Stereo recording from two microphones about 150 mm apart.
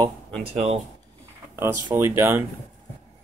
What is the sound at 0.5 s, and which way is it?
Speech, 45° right (ahead or behind).